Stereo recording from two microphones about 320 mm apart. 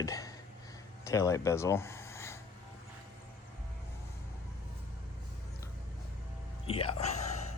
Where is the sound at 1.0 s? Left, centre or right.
Centre.